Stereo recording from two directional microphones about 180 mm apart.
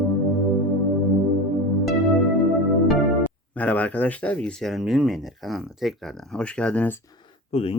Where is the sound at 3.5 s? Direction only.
10° left (ahead or behind).